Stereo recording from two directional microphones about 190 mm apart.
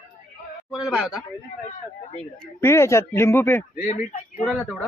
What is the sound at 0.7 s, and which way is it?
Speech, 5° right (ahead or behind).